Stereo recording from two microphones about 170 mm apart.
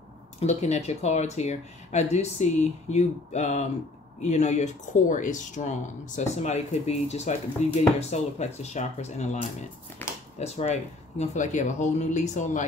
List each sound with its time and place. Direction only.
0.4 s speech: 40° left (ahead or behind)
10.0 s a sound: 10° left (ahead or behind)
10.3 s speech: 40° left (ahead or behind)